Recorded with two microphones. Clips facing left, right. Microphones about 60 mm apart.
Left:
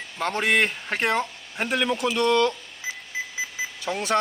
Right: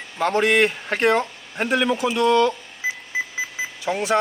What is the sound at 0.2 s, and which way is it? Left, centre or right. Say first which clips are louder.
A man's voice: right 4 dB; centre.